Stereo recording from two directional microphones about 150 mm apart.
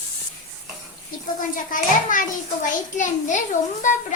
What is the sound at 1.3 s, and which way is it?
A child's voice, 60° left (ahead or behind).